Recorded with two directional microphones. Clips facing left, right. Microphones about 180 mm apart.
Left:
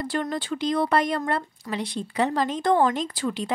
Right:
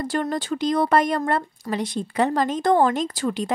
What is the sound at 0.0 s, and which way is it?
Speech, 45° right (ahead or behind).